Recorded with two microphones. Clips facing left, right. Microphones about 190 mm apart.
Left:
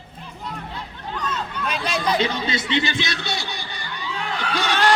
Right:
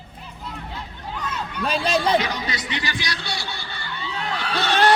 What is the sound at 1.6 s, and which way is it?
Speech, 30° right (ahead or behind).